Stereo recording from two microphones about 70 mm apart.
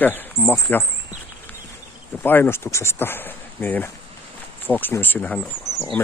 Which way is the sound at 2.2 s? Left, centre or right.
Left.